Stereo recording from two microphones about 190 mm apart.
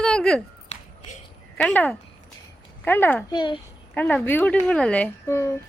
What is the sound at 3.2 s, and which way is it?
Speech, 25° left (ahead or behind).